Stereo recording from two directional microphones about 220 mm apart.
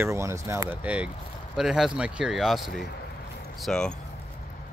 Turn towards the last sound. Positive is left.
turn(degrees=5)  # may be behind; listen again after turning